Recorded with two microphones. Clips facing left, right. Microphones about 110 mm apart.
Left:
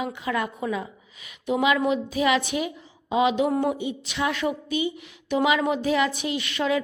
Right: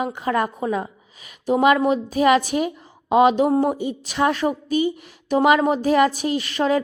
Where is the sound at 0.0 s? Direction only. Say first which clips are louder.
Right 5 dB; 40° right (ahead or behind).